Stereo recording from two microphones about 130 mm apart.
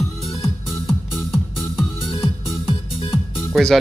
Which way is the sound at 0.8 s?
Centre (ahead or behind).